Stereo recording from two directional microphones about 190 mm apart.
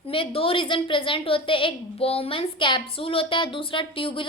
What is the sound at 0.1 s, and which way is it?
A woman's voice, 30° left (ahead or behind).